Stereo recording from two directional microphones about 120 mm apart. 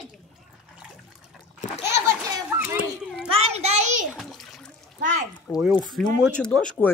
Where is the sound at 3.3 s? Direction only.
60° right (ahead or behind); by 4.0 s 75° right (ahead or behind).